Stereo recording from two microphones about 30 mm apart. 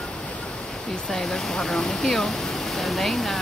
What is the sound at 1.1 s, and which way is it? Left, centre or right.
Speech, centre.